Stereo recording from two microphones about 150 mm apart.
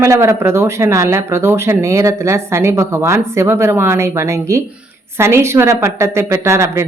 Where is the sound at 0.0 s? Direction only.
20° right (ahead or behind).